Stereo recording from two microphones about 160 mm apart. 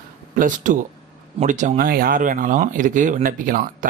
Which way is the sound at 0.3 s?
55° right (ahead or behind).